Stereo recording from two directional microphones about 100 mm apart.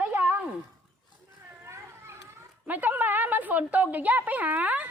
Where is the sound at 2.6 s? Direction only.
15° right (ahead or behind).